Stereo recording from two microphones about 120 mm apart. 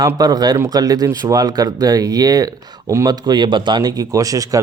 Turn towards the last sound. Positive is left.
turn(degrees=-30)  # may be behind; listen again after turning